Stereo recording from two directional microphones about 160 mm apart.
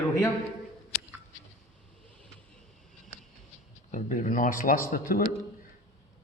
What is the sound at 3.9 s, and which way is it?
A man's voice, 55° left (ahead or behind).